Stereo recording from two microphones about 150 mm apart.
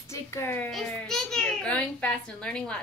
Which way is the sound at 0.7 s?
Centre (ahead or behind).